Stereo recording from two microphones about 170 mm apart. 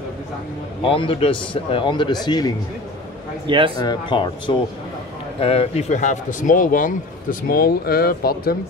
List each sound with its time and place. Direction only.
0.8 s a man's voice: 30° left (ahead or behind)
3.4 s a man's voice: 30° right (ahead or behind)
3.8 s speech: 25° left (ahead or behind); by 8.5 s 65° left (ahead or behind)